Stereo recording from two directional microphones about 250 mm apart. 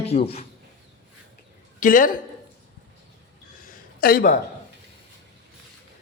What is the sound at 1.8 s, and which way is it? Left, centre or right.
Speech, left.